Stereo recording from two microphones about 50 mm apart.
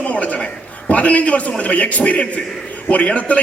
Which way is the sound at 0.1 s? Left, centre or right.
Left.